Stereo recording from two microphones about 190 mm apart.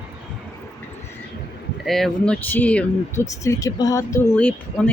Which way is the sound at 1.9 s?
Centre (ahead or behind).